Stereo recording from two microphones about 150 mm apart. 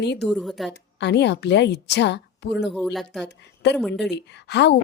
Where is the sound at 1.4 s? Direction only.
90° left.